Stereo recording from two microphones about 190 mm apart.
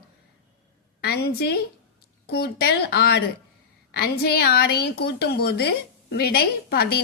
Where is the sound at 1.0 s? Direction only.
60° left (ahead or behind).